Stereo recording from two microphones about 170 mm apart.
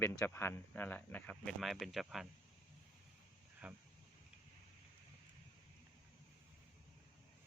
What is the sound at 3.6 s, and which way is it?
Speech, 10° right (ahead or behind).